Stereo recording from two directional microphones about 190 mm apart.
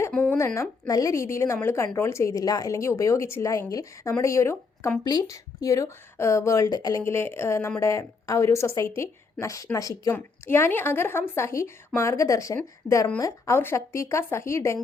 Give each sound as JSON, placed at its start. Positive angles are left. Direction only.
{"t": 0.0, "sound": "a woman's voice", "side_deg": 10}